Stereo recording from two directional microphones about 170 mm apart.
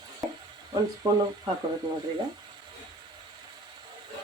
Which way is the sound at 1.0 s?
20° right (ahead or behind).